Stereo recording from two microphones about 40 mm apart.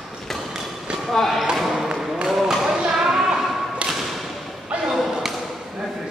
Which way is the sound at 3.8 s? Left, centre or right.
Centre.